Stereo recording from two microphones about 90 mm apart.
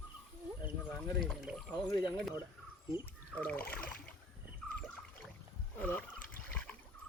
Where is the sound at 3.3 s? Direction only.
15° left (ahead or behind).